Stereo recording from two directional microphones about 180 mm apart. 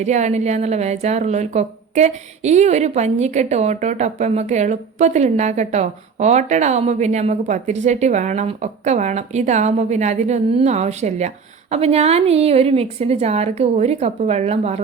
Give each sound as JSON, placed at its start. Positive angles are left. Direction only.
{"t": 0.0, "sound": "a woman's voice", "side_deg": -40}